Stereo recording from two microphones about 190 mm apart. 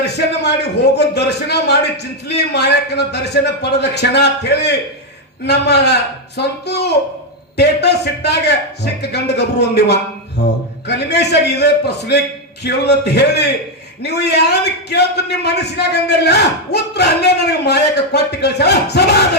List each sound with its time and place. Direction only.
0.0 s a man's voice: 60° left (ahead or behind)